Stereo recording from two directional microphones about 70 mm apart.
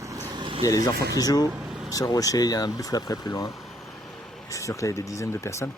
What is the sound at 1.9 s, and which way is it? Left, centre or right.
Speech, left.